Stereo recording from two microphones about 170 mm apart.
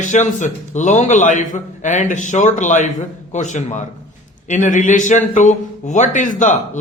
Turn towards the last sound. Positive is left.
turn(degrees=45)  # may be behind; listen again after turning